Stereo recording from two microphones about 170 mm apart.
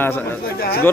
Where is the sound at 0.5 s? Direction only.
65° left (ahead or behind).